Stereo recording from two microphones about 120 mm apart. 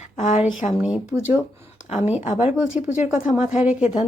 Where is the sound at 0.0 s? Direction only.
85° left.